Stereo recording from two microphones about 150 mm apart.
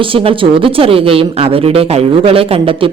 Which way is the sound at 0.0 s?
35° right (ahead or behind).